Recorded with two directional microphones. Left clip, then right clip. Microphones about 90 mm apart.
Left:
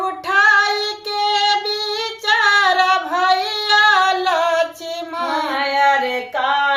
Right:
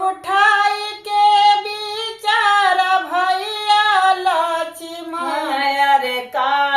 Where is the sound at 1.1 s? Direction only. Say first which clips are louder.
Right 6 dB; 45° left (ahead or behind).